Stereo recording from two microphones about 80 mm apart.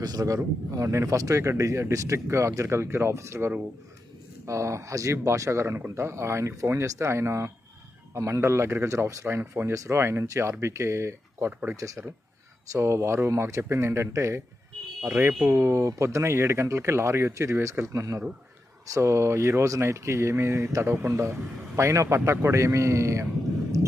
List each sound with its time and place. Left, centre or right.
0.0 s a man's voice: right
0.7 s speech: right
12.7 s speech: right